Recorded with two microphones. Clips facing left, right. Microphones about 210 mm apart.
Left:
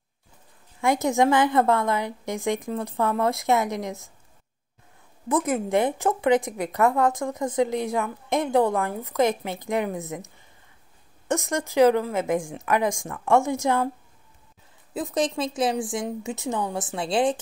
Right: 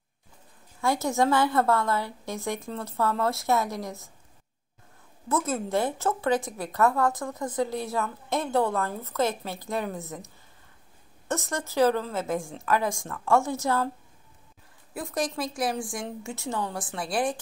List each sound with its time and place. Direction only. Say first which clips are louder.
0.7 s speech: left 4 dB; 15° left (ahead or behind)
5.3 s speech: left 4 dB; 15° left (ahead or behind)
11.2 s speech: left 5 dB; 15° left (ahead or behind)
15.0 s a woman's voice: left 5 dB; 20° left (ahead or behind)